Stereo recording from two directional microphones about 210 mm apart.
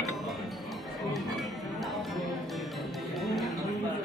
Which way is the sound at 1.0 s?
Centre (ahead or behind).